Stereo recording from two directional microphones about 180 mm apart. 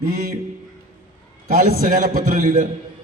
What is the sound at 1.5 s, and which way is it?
A man's voice, 55° right (ahead or behind).